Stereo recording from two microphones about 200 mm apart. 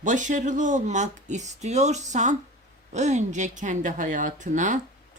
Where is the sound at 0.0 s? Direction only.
40° right (ahead or behind).